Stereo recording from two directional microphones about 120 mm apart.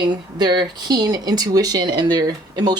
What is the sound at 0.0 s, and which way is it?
Speech, 35° right (ahead or behind).